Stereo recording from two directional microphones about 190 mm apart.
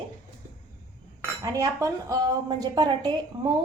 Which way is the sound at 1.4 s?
15° right (ahead or behind).